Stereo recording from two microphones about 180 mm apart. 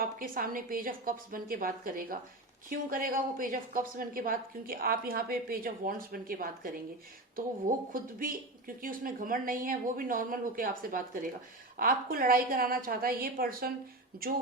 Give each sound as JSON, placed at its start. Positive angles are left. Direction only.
{"t": 0.0, "sound": "a woman's voice", "side_deg": -50}
{"t": 7.9, "sound": "a woman's voice", "side_deg": -50}